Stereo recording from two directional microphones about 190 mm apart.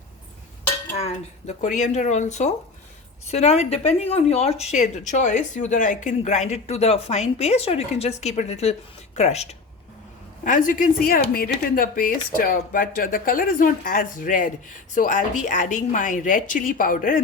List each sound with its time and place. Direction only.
0.9 s speech: 35° left (ahead or behind)